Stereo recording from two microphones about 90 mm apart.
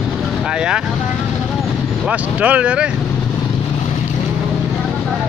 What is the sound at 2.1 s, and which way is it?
Speech, 15° right (ahead or behind).